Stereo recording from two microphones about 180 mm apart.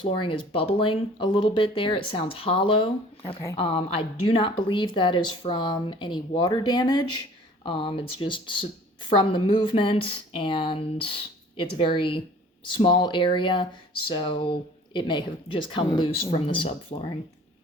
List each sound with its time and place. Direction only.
0.0 s speech: 30° left (ahead or behind)